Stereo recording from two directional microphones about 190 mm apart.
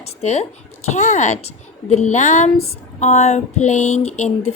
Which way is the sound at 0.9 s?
40° left (ahead or behind).